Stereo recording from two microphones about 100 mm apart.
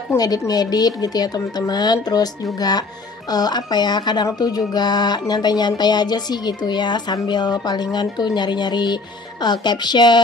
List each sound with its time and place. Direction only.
0.2 s a woman's voice: 40° left (ahead or behind)
3.3 s speech: 40° left (ahead or behind)